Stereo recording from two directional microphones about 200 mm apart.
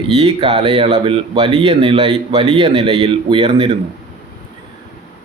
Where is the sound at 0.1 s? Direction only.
30° right (ahead or behind).